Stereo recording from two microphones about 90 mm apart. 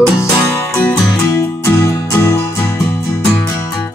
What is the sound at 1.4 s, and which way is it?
Music, 35° left (ahead or behind).